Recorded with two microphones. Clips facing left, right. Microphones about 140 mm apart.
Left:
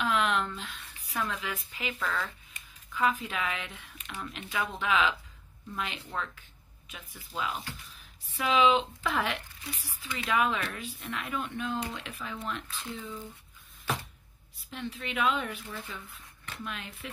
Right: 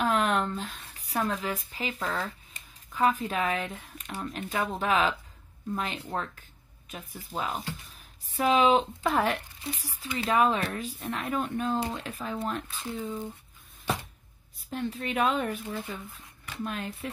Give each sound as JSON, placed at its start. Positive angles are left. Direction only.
{"t": 0.0, "sound": "speech", "side_deg": -45}
{"t": 14.7, "sound": "speech", "side_deg": -45}